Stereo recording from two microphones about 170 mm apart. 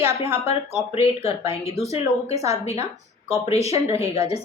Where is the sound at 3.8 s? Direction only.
35° left (ahead or behind).